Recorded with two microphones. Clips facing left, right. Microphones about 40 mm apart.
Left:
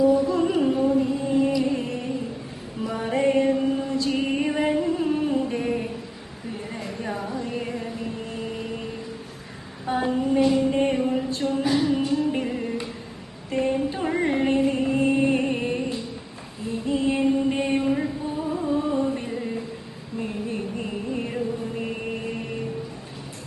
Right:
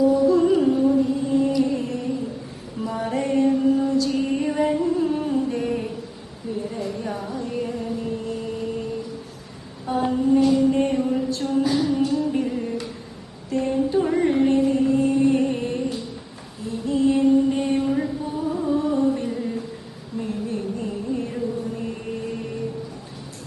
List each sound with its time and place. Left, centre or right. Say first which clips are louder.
0.1 s music: right 3 dB; left
6.6 s a sound: right 5 dB; left
9.8 s a sound: right 2 dB; left
12.0 s music: right 1 dB; left
13.5 s female singing: right 2 dB; left
14.7 s music: right 3 dB; left
17.6 s a sound: right 1 dB; centre
18.8 s chant: right 3 dB; left
20.1 s mantra: right 2 dB; left